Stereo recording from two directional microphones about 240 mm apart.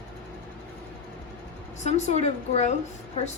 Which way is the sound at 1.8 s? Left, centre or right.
Left.